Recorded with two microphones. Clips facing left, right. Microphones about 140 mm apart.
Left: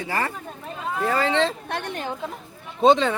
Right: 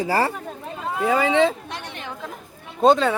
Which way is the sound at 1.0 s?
10° right (ahead or behind).